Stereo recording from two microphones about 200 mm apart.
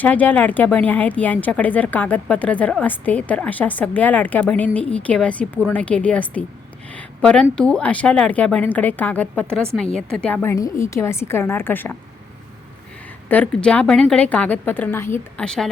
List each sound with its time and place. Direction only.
0.0 s a woman's voice: 10° left (ahead or behind)
13.2 s speech: 10° left (ahead or behind)